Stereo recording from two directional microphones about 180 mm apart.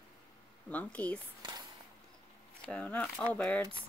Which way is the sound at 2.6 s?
5° left (ahead or behind).